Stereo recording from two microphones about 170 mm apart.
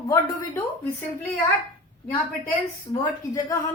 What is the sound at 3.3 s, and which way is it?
Speech, 20° left (ahead or behind).